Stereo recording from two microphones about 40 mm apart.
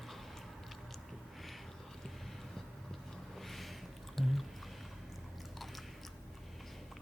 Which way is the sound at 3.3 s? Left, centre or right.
Centre.